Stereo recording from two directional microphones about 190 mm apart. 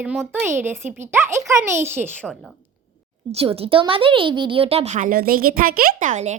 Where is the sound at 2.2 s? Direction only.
5° left (ahead or behind).